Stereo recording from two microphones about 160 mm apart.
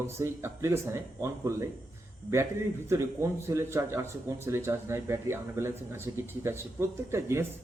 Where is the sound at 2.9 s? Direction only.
15° right (ahead or behind).